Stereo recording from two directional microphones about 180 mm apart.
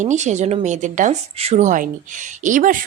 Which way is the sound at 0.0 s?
40° right (ahead or behind).